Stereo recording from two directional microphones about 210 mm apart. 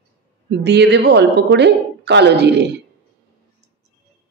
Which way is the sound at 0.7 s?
55° right (ahead or behind).